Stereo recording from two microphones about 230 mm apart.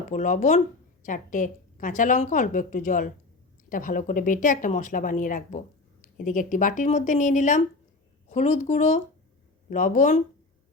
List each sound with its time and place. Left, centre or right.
0.1 s a woman's voice: left